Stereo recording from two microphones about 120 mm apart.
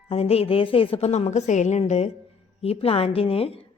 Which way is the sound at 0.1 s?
55° left (ahead or behind).